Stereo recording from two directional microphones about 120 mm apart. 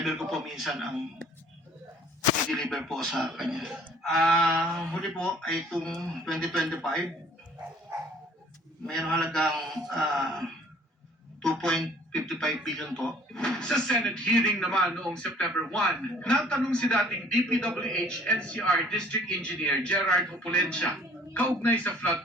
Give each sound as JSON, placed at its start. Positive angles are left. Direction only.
{"t": 0.0, "sound": "a man's voice", "side_deg": 0}
{"t": 2.5, "sound": "a man's voice", "side_deg": 5}
{"t": 4.5, "sound": "a sound", "side_deg": -20}
{"t": 4.9, "sound": "a man's voice", "side_deg": 5}
{"t": 8.9, "sound": "a man's voice", "side_deg": 5}